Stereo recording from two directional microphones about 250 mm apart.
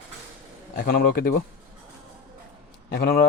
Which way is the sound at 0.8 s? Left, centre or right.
Left.